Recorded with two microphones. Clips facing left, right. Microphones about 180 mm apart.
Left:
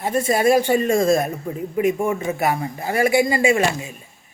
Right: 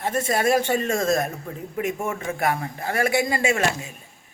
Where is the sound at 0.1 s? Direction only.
Centre (ahead or behind).